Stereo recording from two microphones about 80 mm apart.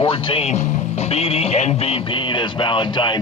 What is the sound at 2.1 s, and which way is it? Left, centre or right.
Music, left.